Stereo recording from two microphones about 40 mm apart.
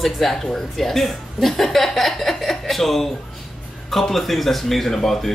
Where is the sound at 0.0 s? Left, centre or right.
Centre.